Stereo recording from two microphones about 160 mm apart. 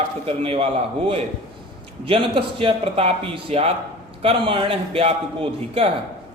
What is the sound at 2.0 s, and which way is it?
A man's voice, 35° right (ahead or behind).